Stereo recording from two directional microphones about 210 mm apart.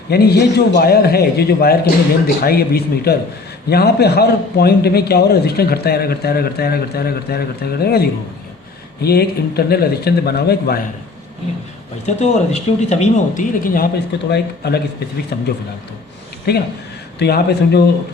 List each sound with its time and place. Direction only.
0.1 s speech: 50° left (ahead or behind)
12.0 s speech: 30° left (ahead or behind); by 14.8 s 50° left (ahead or behind)
16.5 s speech: 50° left (ahead or behind)